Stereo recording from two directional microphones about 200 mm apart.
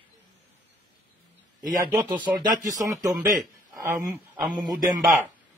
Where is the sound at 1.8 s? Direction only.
15° right (ahead or behind).